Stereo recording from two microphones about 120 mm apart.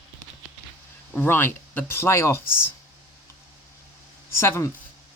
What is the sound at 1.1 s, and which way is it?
Speech, 15° left (ahead or behind).